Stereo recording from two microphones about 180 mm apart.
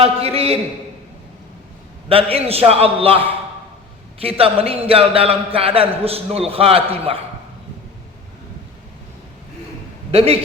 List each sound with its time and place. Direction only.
0.0 s a man's voice: 35° right (ahead or behind)
2.0 s a man's voice: 30° right (ahead or behind)
4.2 s a man's voice: 30° right (ahead or behind)
10.1 s a man's voice: 35° right (ahead or behind)